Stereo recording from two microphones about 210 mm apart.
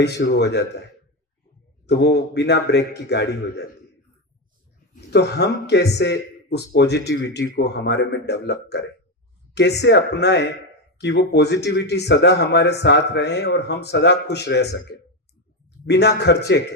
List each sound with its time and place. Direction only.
0.0 s speech: 55° left (ahead or behind)
1.9 s speech: 55° left (ahead or behind)
4.9 s speech: 50° left (ahead or behind)
15.9 s speech: 50° left (ahead or behind)